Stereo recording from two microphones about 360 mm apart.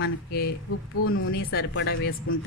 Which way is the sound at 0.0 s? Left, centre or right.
Left.